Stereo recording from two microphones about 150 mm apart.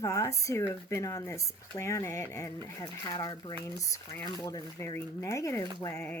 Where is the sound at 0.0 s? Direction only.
20° left (ahead or behind).